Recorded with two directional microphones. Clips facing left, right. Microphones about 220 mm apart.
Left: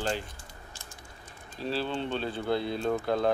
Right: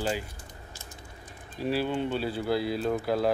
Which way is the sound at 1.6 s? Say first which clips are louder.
Right 3 dB; 10° right (ahead or behind).